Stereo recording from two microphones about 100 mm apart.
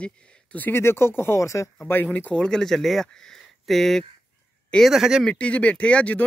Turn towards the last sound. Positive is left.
turn(degrees=10)  # may be behind; listen again after turning